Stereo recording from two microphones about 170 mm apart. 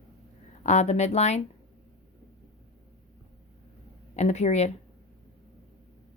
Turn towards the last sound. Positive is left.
turn(degrees=40)  # may be behind; listen again after turning